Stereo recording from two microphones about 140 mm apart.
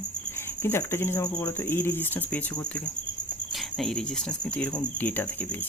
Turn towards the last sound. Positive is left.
turn(degrees=15)  # may be behind; listen again after turning